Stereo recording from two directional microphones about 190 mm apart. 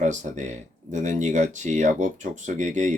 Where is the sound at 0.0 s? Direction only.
40° right (ahead or behind).